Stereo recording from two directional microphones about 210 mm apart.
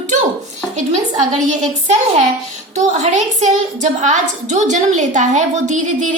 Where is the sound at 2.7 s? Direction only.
35° right (ahead or behind).